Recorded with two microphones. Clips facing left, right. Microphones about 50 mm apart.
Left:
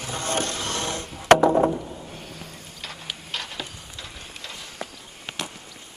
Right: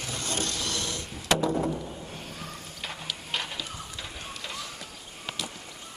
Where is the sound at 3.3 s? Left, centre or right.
Centre.